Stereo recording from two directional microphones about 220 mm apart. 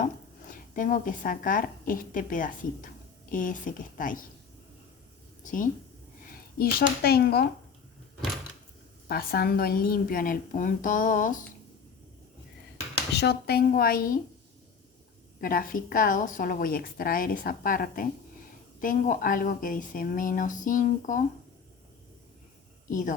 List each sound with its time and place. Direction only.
0.8 s speech: 40° left (ahead or behind)
5.4 s a woman's voice: 35° left (ahead or behind)
9.0 s speech: 45° left (ahead or behind)
13.0 s speech: 50° left (ahead or behind)
15.4 s speech: 40° left (ahead or behind)
22.9 s a woman's voice: 35° left (ahead or behind)